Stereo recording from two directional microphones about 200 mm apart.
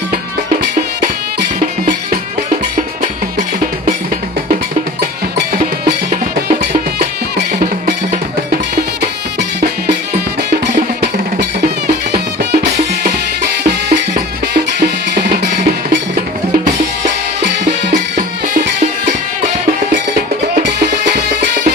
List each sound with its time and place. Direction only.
1.0 s music: 45° right (ahead or behind)
13.7 s music: 45° right (ahead or behind)
20.6 s music: 55° right (ahead or behind)